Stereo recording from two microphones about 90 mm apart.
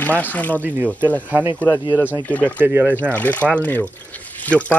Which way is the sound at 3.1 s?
15° left (ahead or behind).